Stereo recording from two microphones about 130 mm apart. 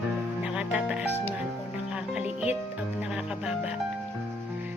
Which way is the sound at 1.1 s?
15° left (ahead or behind).